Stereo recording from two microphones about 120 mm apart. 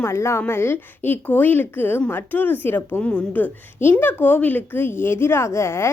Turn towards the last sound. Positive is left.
turn(degrees=20)  # may be behind; listen again after turning